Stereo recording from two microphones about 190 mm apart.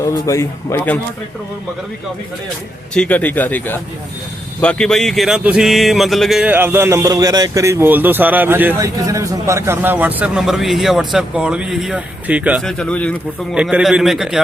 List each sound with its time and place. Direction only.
0.0 s a man's voice: 15° left (ahead or behind)
2.9 s a man's voice: 5° left (ahead or behind)
12.8 s a man's voice: 5° left (ahead or behind)
13.6 s a man's voice: 5° right (ahead or behind)